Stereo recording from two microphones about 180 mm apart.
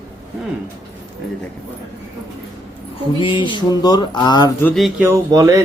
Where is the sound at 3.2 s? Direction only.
25° left (ahead or behind).